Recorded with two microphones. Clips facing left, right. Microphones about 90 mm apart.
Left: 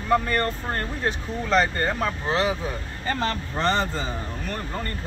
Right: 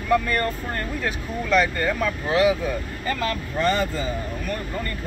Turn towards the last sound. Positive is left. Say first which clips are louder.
# right 2 dB
turn(degrees=35)  # may be behind; listen again after turning